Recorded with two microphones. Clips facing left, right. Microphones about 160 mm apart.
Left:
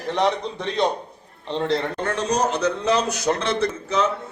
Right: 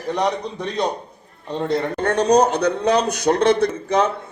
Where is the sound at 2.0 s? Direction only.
65° right (ahead or behind).